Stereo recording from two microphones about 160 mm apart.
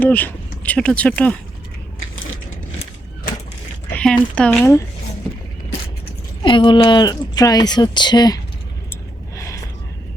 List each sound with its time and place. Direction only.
0.0 s speech: 10° left (ahead or behind)
3.9 s speech: 5° left (ahead or behind)
6.4 s speech: 30° left (ahead or behind)
9.3 s gasp: 20° left (ahead or behind)